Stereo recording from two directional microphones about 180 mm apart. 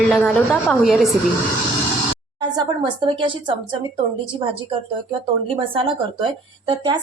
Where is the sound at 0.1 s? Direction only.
5° left (ahead or behind).